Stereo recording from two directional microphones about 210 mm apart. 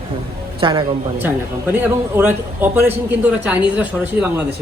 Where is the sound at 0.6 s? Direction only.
20° right (ahead or behind).